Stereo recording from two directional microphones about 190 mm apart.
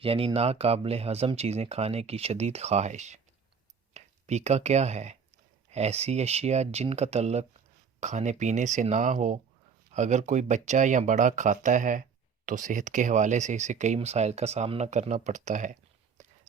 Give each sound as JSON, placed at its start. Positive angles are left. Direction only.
{"t": 0.0, "sound": "speech", "side_deg": -30}